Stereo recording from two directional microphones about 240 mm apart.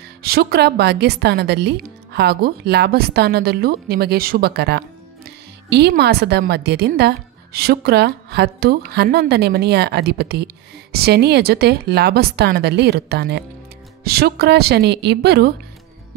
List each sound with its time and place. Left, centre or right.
0.2 s a woman's voice: right